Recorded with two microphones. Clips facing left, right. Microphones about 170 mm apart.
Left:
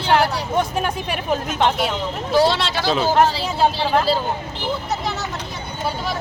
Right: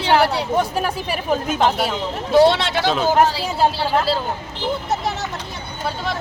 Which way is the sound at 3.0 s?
10° right (ahead or behind).